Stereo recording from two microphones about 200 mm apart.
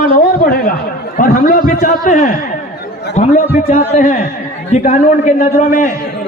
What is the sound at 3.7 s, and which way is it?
A man's voice, 40° left (ahead or behind).